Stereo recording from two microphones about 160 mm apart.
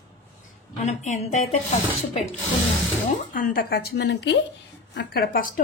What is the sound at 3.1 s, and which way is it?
Speech, 60° left (ahead or behind).